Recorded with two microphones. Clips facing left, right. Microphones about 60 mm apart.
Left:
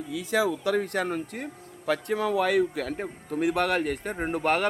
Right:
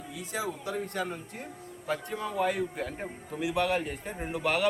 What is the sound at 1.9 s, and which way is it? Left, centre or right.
Speech, left.